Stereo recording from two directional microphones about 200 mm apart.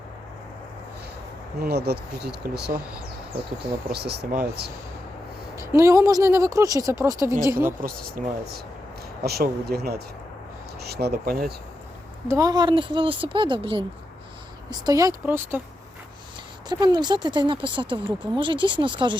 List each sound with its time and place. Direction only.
1.6 s speech: 55° right (ahead or behind)
3.9 s speech: 55° right (ahead or behind)
5.5 s speech: 15° right (ahead or behind)
7.8 s speech: 45° right (ahead or behind)
12.3 s speech: 15° right (ahead or behind)
16.6 s speech: 20° right (ahead or behind)